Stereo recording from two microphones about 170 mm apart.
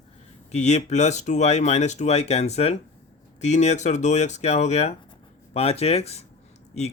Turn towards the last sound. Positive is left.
turn(degrees=40)  # may be behind; listen again after turning